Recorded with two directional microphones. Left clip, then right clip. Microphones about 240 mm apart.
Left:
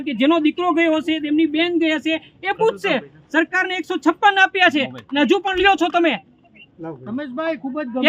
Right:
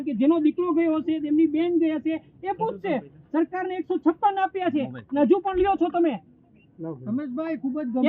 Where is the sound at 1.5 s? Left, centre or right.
Centre.